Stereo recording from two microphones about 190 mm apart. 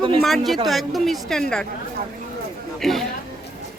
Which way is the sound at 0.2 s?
Centre (ahead or behind).